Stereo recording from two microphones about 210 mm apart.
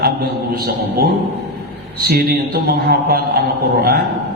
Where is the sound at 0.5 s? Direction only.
45° right (ahead or behind).